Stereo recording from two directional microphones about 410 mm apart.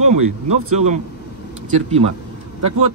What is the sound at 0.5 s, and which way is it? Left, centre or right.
Speech, centre.